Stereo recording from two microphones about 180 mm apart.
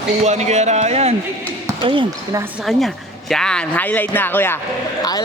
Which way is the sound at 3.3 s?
5° left (ahead or behind).